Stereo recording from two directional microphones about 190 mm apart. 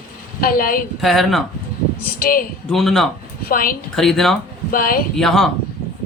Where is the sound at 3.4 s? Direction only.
50° left (ahead or behind).